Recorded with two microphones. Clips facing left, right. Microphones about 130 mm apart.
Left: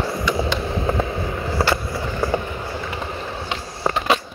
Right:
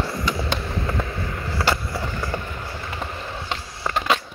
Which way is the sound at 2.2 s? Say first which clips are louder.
Left 6 dB; 30° left (ahead or behind).